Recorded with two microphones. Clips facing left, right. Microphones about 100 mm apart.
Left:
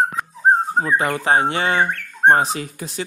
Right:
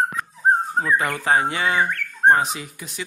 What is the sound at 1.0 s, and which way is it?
Speech, 25° left (ahead or behind).